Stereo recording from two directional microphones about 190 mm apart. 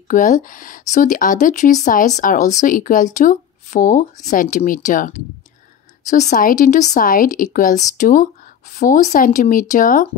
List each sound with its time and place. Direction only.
0.1 s speech: 45° left (ahead or behind)